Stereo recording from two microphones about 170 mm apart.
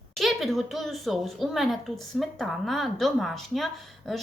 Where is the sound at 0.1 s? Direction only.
Centre (ahead or behind).